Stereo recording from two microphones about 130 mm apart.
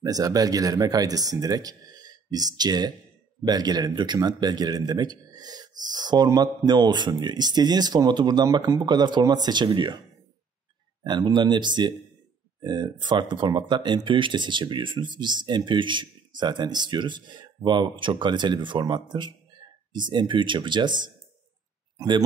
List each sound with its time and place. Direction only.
0.0 s speech: 30° right (ahead or behind)
11.1 s speech: 35° right (ahead or behind)
21.9 s a sound: 35° right (ahead or behind)